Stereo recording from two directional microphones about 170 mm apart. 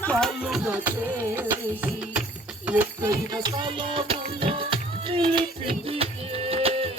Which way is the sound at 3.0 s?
25° right (ahead or behind).